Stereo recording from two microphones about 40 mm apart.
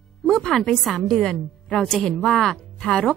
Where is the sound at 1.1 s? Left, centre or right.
Left.